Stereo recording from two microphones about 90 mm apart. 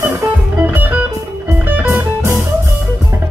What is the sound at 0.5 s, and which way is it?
Music, 20° right (ahead or behind).